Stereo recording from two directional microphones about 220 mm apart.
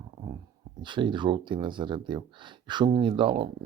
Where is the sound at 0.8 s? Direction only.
20° right (ahead or behind).